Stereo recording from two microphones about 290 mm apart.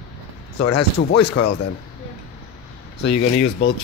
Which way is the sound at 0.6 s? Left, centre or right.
Left.